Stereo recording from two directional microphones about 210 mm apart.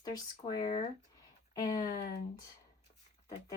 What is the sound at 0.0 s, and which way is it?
Speech, 20° left (ahead or behind).